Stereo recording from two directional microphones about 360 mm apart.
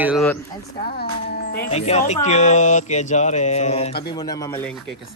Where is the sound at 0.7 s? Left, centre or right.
Left.